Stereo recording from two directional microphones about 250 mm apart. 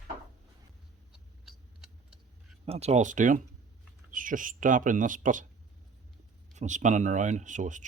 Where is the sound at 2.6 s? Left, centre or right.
Right.